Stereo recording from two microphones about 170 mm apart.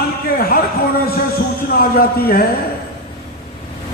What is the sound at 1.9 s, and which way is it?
Music, 60° left (ahead or behind).